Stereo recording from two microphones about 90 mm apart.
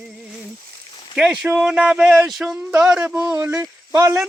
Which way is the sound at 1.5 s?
10° right (ahead or behind).